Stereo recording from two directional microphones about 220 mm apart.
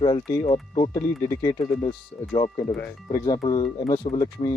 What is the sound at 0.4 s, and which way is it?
Speech, 30° left (ahead or behind).